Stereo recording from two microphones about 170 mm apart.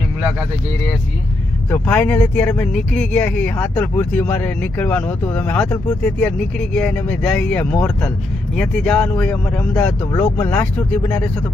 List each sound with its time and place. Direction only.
1.7 s speech: 10° left (ahead or behind)